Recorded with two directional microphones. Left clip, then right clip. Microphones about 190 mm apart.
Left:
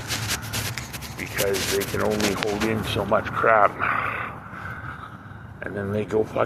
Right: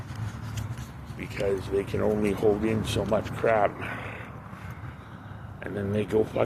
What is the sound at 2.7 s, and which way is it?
Speech, 10° right (ahead or behind).